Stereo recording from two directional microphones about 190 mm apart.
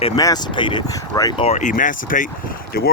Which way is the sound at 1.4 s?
35° left (ahead or behind).